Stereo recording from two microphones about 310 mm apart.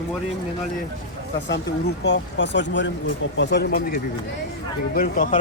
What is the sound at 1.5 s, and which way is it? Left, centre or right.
Speech, left.